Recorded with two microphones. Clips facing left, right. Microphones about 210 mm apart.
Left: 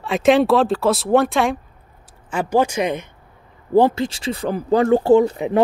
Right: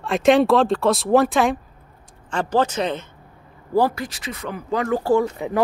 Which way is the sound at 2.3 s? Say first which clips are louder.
Left 2 dB; 10° left (ahead or behind).